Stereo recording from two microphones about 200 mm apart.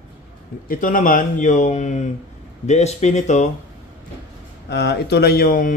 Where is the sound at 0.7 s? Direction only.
40° left (ahead or behind).